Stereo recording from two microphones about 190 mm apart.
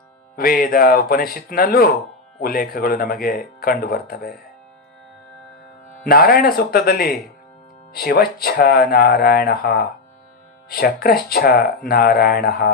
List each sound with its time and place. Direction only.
0.3 s speech: 50° left (ahead or behind)
6.1 s speech: 50° left (ahead or behind)